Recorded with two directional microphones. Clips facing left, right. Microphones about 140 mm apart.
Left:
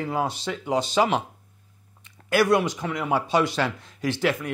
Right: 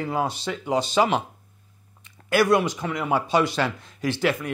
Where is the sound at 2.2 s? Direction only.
15° right (ahead or behind).